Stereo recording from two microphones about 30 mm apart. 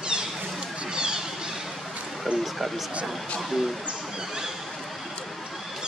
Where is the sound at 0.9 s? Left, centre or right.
Right.